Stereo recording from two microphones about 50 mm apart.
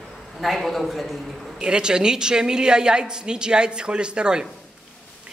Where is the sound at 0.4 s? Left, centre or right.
Centre.